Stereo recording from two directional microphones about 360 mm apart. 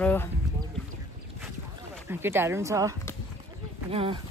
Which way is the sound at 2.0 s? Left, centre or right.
Centre.